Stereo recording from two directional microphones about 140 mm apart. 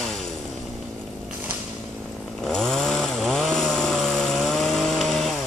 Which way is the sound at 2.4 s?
5° left (ahead or behind).